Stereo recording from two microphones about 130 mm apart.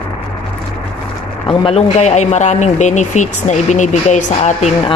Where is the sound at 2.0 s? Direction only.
60° left (ahead or behind).